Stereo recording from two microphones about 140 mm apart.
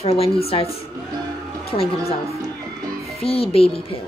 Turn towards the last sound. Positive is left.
turn(degrees=45)  # may be behind; listen again after turning